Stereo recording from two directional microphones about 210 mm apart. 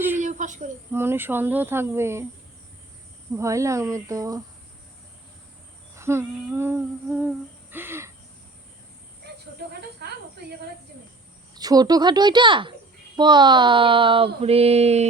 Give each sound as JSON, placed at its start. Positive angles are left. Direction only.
{"t": 0.2, "sound": "a sound", "side_deg": -35}
{"t": 0.9, "sound": "speech", "side_deg": -10}
{"t": 3.3, "sound": "speech", "side_deg": -15}
{"t": 6.0, "sound": "humming", "side_deg": -10}
{"t": 10.0, "sound": "snake", "side_deg": -50}
{"t": 11.5, "sound": "speech", "side_deg": -20}